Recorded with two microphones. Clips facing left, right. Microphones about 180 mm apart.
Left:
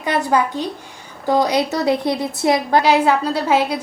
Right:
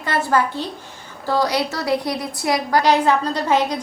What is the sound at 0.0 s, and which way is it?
A woman's voice, 15° left (ahead or behind).